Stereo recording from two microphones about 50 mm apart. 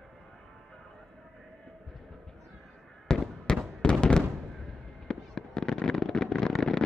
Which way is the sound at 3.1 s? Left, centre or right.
Centre.